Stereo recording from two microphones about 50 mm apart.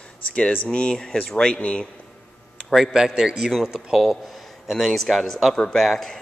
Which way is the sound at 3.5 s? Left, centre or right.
Centre.